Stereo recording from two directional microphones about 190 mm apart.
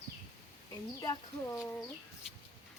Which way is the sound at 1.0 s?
20° left (ahead or behind).